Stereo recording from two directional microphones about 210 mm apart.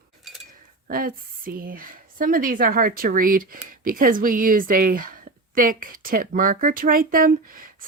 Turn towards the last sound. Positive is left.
turn(degrees=-40)  # may be behind; listen again after turning